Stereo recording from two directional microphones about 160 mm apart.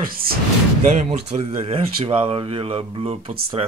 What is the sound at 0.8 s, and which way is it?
Speech, 40° right (ahead or behind).